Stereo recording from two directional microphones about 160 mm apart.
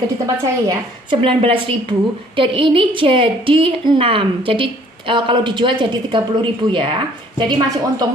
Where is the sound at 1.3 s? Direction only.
35° right (ahead or behind).